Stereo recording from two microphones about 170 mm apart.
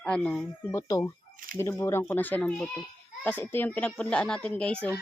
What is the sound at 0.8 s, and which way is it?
Speech, 20° left (ahead or behind).